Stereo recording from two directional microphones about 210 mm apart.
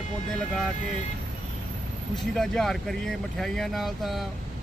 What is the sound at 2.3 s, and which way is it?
Speech, centre (ahead or behind).